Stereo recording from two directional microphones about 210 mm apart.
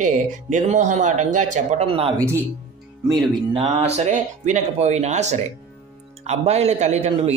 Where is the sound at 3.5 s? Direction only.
30° right (ahead or behind).